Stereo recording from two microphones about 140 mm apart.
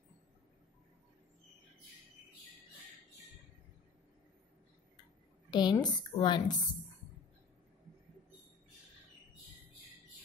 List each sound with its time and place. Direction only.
5.5 s a woman's voice: 30° left (ahead or behind)